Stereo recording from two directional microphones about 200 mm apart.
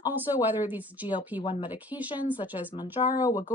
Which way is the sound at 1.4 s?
25° left (ahead or behind).